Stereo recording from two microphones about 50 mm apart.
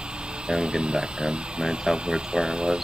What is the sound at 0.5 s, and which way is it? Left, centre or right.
Speech, centre.